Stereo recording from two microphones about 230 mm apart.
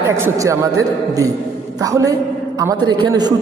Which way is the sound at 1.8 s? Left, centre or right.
Centre.